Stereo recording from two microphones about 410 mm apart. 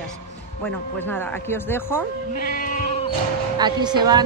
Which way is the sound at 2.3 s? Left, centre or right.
Left.